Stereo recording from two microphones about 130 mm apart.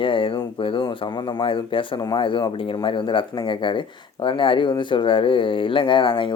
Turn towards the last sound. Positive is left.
turn(degrees=40)  # may be behind; listen again after turning